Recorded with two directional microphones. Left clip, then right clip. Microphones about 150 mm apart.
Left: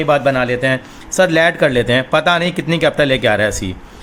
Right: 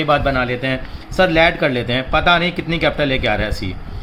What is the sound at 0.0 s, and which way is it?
Speech, 35° left (ahead or behind).